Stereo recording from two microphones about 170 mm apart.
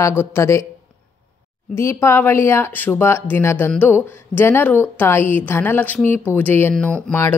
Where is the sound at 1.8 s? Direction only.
15° left (ahead or behind).